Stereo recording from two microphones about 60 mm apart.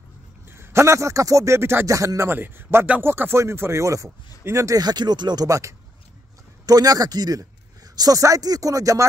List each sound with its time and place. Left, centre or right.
0.5 s speech: right
1.9 s speech: right
2.2 s a man's voice: right
5.3 s speech: right
6.6 s speech: right